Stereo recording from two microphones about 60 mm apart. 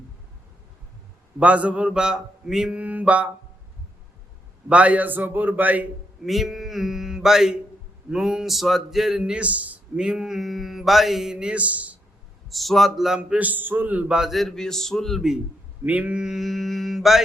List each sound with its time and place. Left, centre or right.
1.4 s speech: right
2.7 s a man's voice: right
4.7 s a man's voice: right
6.2 s a man's voice: centre; by 11.9 s right
12.5 s a man's voice: centre
13.1 s a man's voice: right
14.1 s a man's voice: centre
15.9 s a man's voice: right
16.2 s a man's voice: centre